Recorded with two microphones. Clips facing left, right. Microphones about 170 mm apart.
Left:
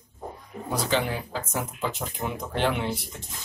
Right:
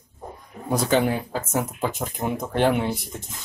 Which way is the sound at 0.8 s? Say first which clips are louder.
Right 6 dB; 50° right (ahead or behind).